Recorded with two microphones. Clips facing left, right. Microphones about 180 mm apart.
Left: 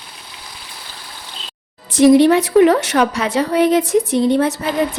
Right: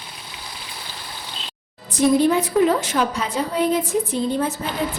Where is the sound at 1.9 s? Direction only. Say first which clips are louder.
Left 7 dB; 90° left.